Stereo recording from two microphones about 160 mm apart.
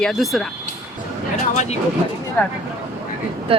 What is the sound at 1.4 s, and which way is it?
Speech, 45° left (ahead or behind).